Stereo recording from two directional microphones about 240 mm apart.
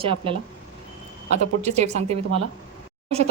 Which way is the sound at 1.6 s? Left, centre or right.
Right.